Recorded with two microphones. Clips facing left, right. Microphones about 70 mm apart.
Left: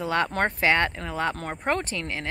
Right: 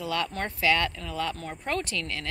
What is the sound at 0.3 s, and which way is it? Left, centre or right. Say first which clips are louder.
Speech: left 3 dB; left.